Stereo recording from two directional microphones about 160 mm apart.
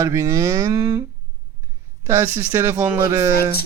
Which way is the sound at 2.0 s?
20° right (ahead or behind).